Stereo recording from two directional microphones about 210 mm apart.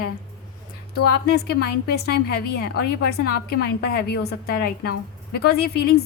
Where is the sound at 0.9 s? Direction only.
50° left (ahead or behind).